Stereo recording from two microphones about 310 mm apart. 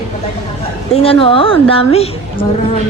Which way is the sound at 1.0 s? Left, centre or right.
Centre.